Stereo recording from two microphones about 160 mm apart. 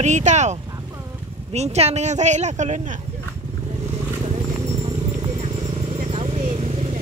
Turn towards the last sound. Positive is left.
turn(degrees=-40)  # may be behind; listen again after turning